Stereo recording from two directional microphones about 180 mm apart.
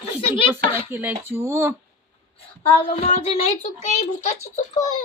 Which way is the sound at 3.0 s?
35° left (ahead or behind).